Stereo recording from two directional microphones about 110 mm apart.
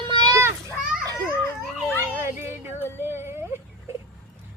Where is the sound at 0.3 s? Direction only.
25° right (ahead or behind).